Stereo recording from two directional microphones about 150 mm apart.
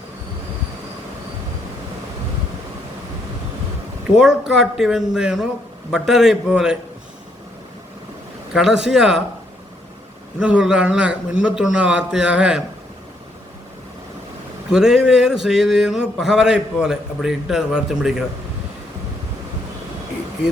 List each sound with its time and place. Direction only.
4.2 s a man's voice: 5° right (ahead or behind)
8.5 s a man's voice: 5° right (ahead or behind)
10.4 s a man's voice: 5° right (ahead or behind)
14.7 s a man's voice: 5° right (ahead or behind)